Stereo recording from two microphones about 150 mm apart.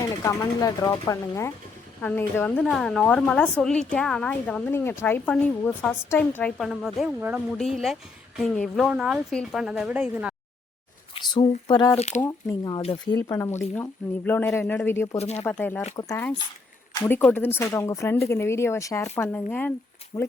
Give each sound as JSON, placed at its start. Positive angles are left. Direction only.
{"t": 0.2, "sound": "a woman's voice", "side_deg": 20}
{"t": 6.6, "sound": "a woman's voice", "side_deg": 0}
{"t": 7.6, "sound": "a woman's voice", "side_deg": 0}
{"t": 11.1, "sound": "a sound", "side_deg": 30}
{"t": 11.7, "sound": "speech", "side_deg": 25}
{"t": 11.9, "sound": "speech", "side_deg": 50}
{"t": 12.8, "sound": "speech", "side_deg": 35}
{"t": 13.2, "sound": "a woman's voice", "side_deg": 20}
{"t": 15.2, "sound": "speech", "side_deg": 45}
{"t": 15.4, "sound": "a woman's voice", "side_deg": 10}
{"t": 20.1, "sound": "speech", "side_deg": 25}